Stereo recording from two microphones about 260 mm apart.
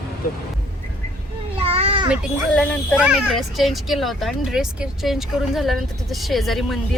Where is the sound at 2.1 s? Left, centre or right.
Centre.